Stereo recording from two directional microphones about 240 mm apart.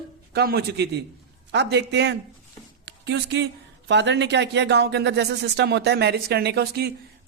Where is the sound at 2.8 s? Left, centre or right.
Right.